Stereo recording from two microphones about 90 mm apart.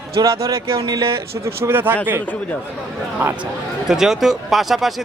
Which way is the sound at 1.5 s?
25° right (ahead or behind).